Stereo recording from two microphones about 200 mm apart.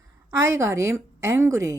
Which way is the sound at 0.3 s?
15° right (ahead or behind).